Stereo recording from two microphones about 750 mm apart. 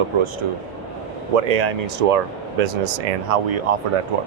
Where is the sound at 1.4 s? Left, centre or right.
Right.